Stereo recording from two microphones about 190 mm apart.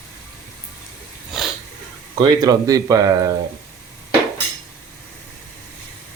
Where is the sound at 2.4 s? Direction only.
20° right (ahead or behind).